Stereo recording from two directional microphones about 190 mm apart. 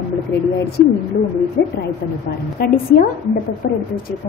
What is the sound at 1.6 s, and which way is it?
A woman's voice, 60° left (ahead or behind).